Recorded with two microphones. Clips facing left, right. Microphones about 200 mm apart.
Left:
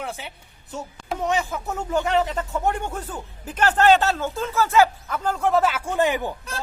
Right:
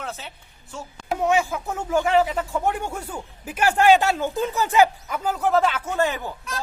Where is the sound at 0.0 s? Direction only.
15° left (ahead or behind).